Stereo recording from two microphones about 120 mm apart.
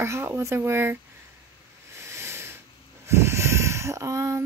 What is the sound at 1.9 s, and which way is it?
Hiss, 25° right (ahead or behind).